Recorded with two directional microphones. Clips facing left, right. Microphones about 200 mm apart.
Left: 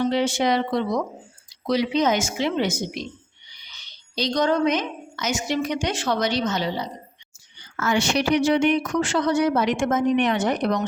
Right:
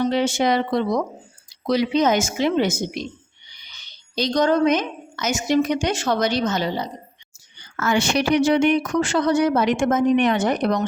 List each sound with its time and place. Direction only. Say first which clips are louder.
0.1 s speech: right 2 dB; 45° right (ahead or behind)
4.1 s speech: right 3 dB; 45° right (ahead or behind)